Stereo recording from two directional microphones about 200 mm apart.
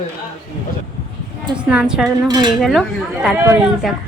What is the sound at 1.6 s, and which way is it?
Speech, 5° right (ahead or behind).